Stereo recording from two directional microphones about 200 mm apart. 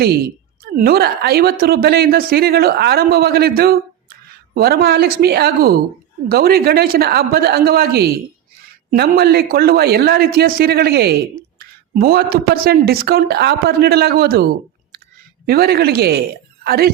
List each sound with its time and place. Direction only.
0.6 s a woman's voice: 50° right (ahead or behind)
15.4 s a woman's voice: 50° right (ahead or behind)